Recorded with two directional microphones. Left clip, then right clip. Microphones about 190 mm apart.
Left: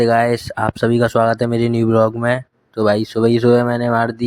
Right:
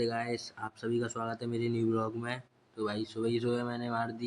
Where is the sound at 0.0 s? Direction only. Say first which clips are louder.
Left 19 dB; 50° left (ahead or behind).